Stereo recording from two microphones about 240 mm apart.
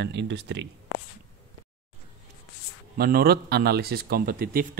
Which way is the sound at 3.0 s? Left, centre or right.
Right.